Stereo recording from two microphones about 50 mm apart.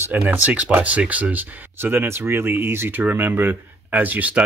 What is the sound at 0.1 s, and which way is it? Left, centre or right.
Speech, right.